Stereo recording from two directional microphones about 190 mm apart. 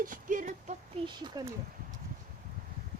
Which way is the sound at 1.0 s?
25° right (ahead or behind).